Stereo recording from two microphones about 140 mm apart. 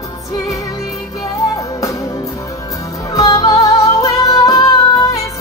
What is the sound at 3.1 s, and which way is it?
Music, 25° left (ahead or behind).